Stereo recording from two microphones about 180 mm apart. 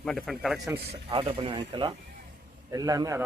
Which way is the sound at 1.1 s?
30° right (ahead or behind).